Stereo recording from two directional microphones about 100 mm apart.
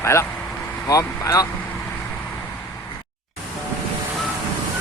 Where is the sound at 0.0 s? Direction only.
25° left (ahead or behind).